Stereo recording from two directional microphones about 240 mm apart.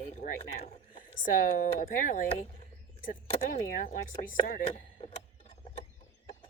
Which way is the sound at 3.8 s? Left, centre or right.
Left.